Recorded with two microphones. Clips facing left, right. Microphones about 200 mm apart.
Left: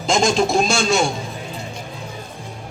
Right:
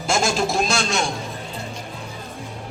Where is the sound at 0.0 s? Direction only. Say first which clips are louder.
Left 4 dB; 5° right (ahead or behind).